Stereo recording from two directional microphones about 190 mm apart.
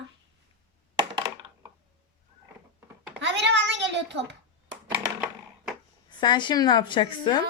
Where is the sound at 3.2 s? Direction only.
70° right (ahead or behind).